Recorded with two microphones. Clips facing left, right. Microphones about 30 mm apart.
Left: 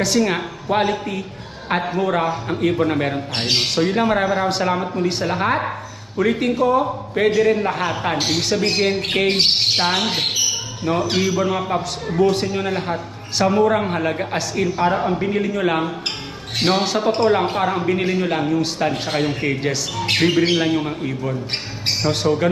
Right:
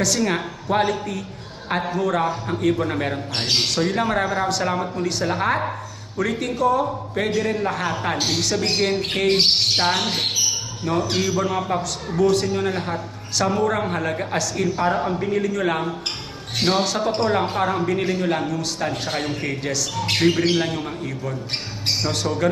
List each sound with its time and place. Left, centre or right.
0.0 s a man's voice: centre
9.4 s squawk: left
10.0 s a man's voice: left
12.0 s squawk: left
12.3 s a man's voice: left
17.5 s a man's voice: centre